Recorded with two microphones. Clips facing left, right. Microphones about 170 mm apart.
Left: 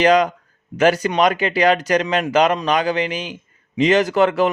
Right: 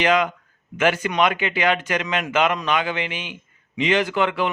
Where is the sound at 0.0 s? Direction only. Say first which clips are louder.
Left 5 dB; 40° left (ahead or behind).